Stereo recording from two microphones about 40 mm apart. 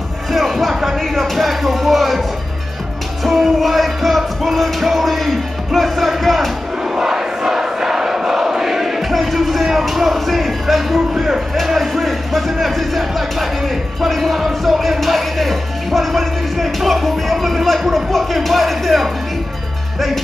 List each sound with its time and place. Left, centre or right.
0.3 s music: centre
3.3 s music: centre
7.0 s crowd: centre
9.1 s music: centre
11.6 s speech: centre
14.0 s music: centre